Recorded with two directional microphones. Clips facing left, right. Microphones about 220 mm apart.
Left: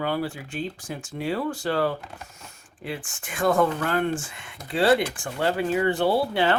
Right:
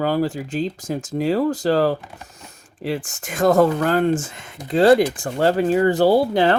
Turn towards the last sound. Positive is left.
turn(degrees=-40)  # may be behind; listen again after turning